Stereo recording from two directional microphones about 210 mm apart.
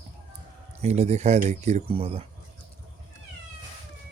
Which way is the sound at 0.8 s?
30° right (ahead or behind).